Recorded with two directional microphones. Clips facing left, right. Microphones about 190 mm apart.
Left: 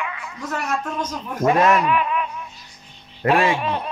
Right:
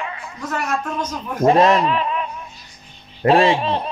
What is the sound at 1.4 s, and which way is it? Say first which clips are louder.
Speech: right 3 dB; 35° right (ahead or behind).